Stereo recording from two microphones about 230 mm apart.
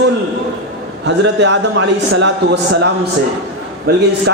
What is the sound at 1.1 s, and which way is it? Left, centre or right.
A man's voice, right.